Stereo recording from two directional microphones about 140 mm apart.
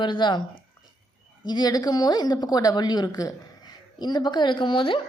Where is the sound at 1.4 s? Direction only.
30° left (ahead or behind).